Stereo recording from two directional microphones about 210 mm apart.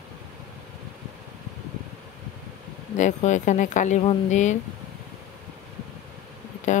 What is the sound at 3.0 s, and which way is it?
Speech, 35° left (ahead or behind).